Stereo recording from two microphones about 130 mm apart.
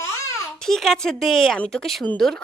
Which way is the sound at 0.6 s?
Centre (ahead or behind).